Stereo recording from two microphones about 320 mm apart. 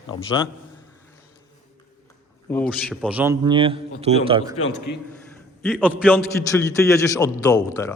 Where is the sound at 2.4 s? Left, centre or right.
Centre.